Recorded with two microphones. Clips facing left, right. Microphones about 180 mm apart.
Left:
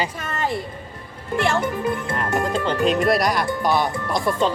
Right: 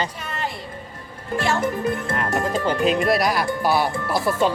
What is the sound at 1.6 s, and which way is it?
Speech, 40° right (ahead or behind).